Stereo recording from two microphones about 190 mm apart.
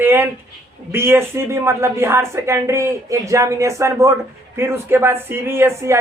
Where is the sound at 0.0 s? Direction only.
10° right (ahead or behind).